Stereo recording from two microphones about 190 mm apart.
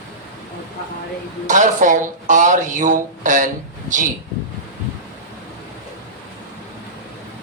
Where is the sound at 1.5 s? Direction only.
40° right (ahead or behind).